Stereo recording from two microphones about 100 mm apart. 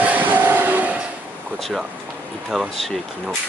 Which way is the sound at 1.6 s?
5° right (ahead or behind).